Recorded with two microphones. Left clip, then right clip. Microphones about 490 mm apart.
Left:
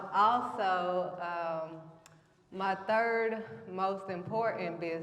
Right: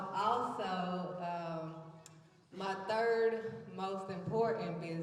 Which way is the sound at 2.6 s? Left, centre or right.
Left.